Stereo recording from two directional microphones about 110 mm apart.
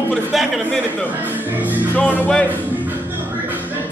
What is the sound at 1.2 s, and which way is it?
Music, 15° right (ahead or behind).